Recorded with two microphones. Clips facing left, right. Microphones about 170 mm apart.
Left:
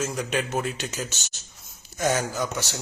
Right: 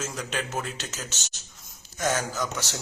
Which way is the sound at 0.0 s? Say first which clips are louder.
Left 5 dB; 15° left (ahead or behind).